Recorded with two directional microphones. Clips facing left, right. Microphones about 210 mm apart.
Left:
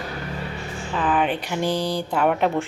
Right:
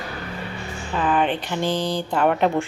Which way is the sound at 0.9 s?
5° left (ahead or behind).